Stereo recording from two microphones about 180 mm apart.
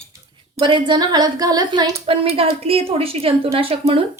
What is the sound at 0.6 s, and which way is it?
A woman's voice, 25° right (ahead or behind).